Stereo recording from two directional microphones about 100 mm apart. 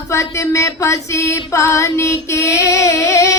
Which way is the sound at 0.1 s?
30° left (ahead or behind).